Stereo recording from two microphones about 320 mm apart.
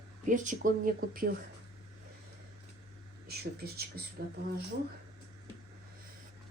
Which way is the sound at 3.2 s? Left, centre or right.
Right.